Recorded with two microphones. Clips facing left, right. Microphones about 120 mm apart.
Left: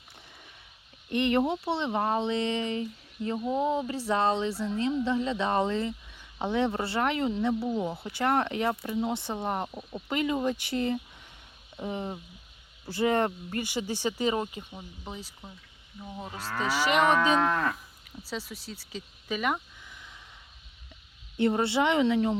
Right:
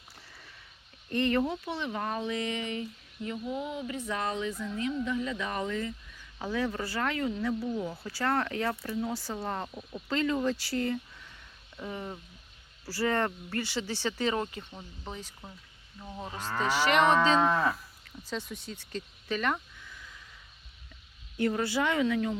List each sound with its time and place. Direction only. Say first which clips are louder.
1.1 s speech: left 2 dB; 20° left (ahead or behind); by 15.5 s centre (ahead or behind)
16.0 s livestock: even; centre (ahead or behind)
16.6 s speech: even; 10° left (ahead or behind)
17.4 s livestock: right 1 dB; 5° right (ahead or behind)
18.0 s speech: even; 10° left (ahead or behind)
19.9 s snort: even; 20° left (ahead or behind)
21.3 s speech: left 3 dB; 25° left (ahead or behind)